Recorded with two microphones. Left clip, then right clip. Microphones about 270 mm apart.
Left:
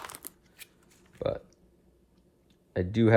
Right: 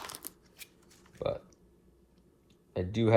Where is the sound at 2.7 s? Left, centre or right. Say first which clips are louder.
Left 4 dB; left.